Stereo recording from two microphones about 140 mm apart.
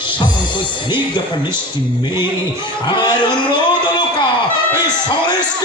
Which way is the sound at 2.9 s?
35° left (ahead or behind).